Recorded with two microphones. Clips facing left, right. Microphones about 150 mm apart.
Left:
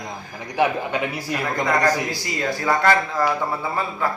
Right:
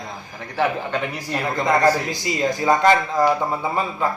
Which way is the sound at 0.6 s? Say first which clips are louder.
Left 1 dB; 10° left (ahead or behind).